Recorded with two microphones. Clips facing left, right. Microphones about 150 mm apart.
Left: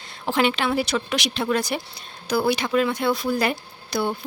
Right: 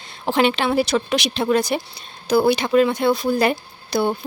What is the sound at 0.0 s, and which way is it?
A woman's voice, 25° right (ahead or behind).